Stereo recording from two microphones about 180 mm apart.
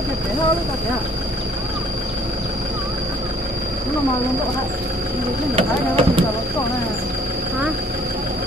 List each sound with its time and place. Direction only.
5.6 s speech: 35° right (ahead or behind)